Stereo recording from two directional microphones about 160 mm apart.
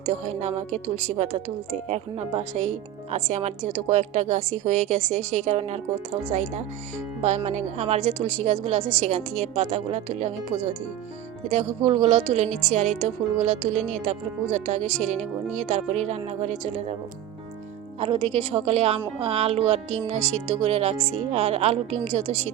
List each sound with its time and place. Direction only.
0.1 s speech: 45° right (ahead or behind)
11.9 s speech: 45° right (ahead or behind)
18.0 s speech: 35° right (ahead or behind)